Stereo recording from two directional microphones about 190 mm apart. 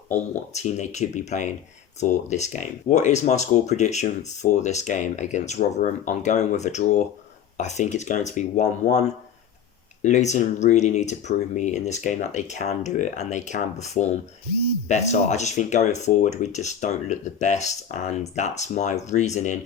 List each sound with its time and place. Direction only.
0.1 s speech: 40° left (ahead or behind)